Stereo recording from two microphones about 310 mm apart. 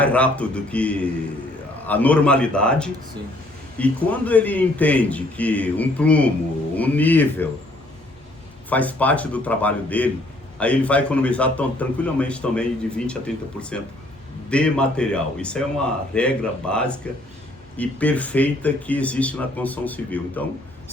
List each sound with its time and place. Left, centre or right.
0.0 s a man's voice: centre
8.7 s a man's voice: centre